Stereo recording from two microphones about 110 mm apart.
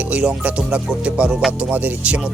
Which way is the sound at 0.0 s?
10° right (ahead or behind).